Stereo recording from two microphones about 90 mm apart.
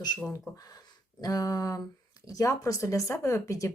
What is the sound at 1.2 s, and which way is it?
Speech, 45° left (ahead or behind).